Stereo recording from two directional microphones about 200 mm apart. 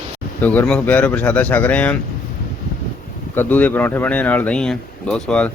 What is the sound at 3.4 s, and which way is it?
Speech, 10° left (ahead or behind).